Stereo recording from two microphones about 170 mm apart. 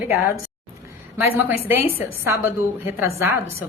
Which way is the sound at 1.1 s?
15° right (ahead or behind).